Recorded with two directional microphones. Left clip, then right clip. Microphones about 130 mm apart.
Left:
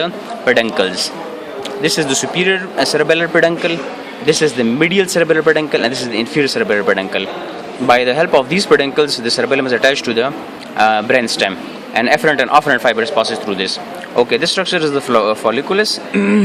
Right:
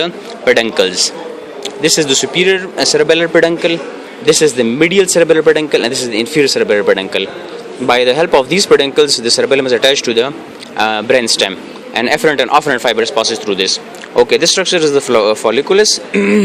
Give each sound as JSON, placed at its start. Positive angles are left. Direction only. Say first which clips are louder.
{"t": 0.0, "sound": "speech", "louder": "right 2 dB", "side_deg": -25}